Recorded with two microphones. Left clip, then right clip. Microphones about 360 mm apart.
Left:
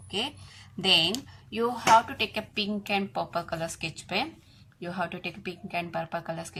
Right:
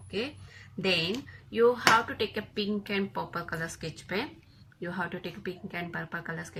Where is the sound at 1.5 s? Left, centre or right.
Centre.